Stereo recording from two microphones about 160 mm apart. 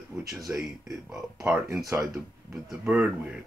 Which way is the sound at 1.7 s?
20° right (ahead or behind).